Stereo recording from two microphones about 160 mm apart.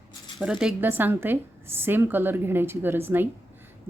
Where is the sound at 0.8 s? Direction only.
10° right (ahead or behind).